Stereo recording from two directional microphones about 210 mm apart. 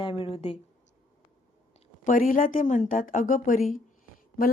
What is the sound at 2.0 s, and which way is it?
A woman's voice, 40° left (ahead or behind).